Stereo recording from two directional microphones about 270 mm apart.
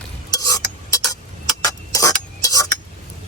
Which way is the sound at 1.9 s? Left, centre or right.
Centre.